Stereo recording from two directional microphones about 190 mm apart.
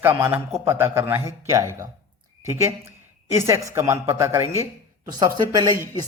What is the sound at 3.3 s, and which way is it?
Speech, 15° right (ahead or behind).